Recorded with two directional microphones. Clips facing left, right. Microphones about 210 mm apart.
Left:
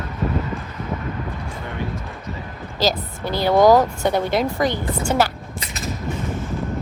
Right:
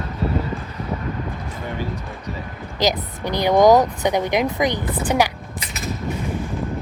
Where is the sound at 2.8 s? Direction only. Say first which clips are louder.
Even; 20° right (ahead or behind).